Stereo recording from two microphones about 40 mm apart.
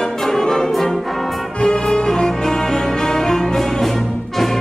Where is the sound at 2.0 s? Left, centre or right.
Centre.